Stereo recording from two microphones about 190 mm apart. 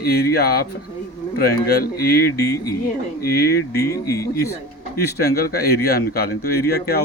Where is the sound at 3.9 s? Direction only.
15° left (ahead or behind).